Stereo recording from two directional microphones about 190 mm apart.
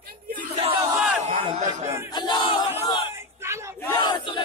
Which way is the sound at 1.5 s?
40° right (ahead or behind).